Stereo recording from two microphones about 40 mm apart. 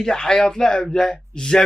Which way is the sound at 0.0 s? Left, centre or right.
Centre.